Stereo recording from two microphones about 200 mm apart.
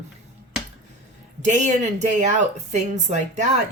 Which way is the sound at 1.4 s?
35° right (ahead or behind).